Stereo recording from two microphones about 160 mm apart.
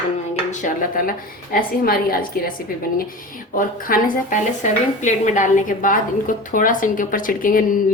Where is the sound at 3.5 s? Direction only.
60° left (ahead or behind).